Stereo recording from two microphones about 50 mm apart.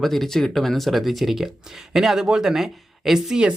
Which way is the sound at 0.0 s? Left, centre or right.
Centre.